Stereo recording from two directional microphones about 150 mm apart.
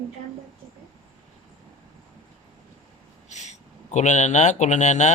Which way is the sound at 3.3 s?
50° left (ahead or behind).